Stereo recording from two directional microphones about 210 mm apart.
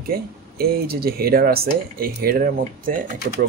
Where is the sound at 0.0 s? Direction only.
45° right (ahead or behind).